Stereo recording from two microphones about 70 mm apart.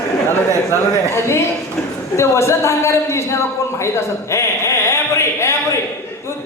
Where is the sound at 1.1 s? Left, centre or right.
Left.